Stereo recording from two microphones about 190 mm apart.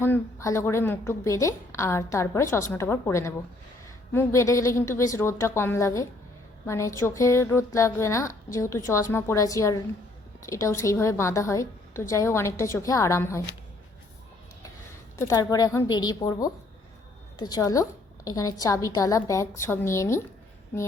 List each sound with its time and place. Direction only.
0.0 s a woman's voice: 15° left (ahead or behind)
15.2 s a woman's voice: 15° left (ahead or behind)